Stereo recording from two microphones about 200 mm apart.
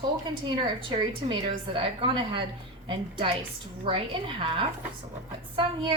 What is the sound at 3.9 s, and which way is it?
Speech, 25° right (ahead or behind).